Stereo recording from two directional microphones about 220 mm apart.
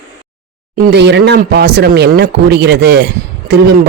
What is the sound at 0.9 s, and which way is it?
Speech, 50° right (ahead or behind).